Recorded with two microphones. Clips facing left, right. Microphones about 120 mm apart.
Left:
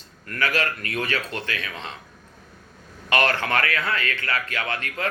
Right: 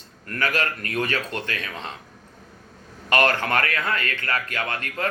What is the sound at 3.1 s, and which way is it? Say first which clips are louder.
Speech: right 1 dB; 45° right (ahead or behind).